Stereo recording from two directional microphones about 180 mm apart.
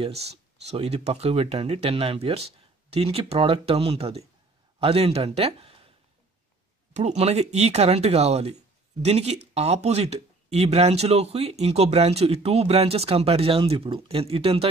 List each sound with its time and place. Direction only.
0.7 s a man's voice: 35° right (ahead or behind)
6.9 s speech: 40° right (ahead or behind)